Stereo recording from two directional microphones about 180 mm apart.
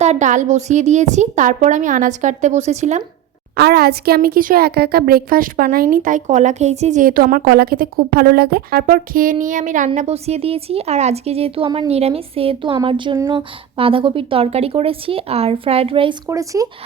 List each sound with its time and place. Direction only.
0.0 s a woman's voice: 40° right (ahead or behind)
3.5 s a woman's voice: 65° right (ahead or behind); by 16.6 s 20° right (ahead or behind)